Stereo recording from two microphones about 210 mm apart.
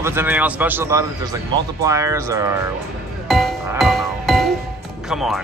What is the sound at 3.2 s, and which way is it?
Music, centre (ahead or behind).